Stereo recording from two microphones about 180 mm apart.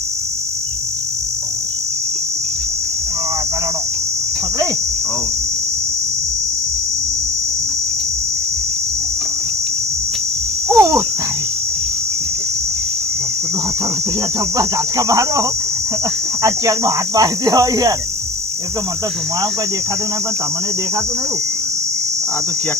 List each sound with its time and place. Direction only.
10.7 s insect: 15° right (ahead or behind)
14.6 s speech: 20° right (ahead or behind)